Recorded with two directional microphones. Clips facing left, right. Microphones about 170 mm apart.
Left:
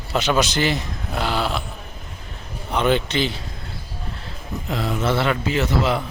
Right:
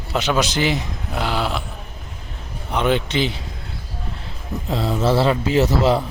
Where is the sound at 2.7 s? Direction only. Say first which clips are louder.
Even; 10° right (ahead or behind).